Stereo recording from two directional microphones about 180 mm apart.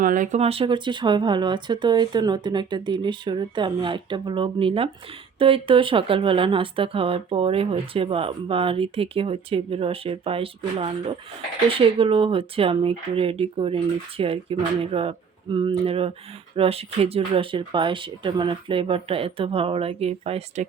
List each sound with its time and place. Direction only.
0.0 s speech: 45° right (ahead or behind)